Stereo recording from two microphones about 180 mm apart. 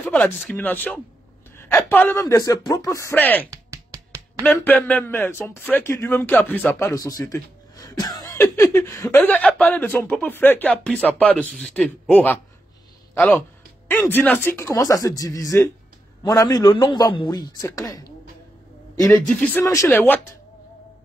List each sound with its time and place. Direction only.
0.5 s a man's voice: 10° left (ahead or behind)
3.4 s music: 15° right (ahead or behind)
4.4 s a man's voice: 10° left (ahead or behind)
19.2 s a man's voice: 10° left (ahead or behind)